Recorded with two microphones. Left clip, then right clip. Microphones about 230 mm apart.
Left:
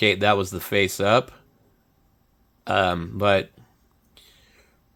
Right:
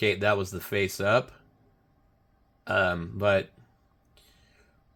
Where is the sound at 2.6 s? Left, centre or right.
Left.